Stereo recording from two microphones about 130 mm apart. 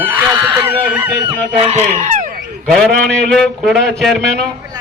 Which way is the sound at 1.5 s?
55° right (ahead or behind).